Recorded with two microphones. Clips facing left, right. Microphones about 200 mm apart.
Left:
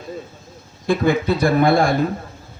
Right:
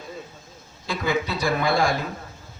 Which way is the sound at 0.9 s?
55° left (ahead or behind).